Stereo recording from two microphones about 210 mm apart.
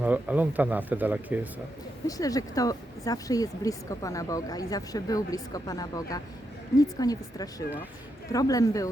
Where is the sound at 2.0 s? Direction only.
15° left (ahead or behind).